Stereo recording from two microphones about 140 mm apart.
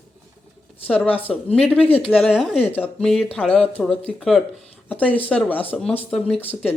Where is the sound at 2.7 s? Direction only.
10° left (ahead or behind).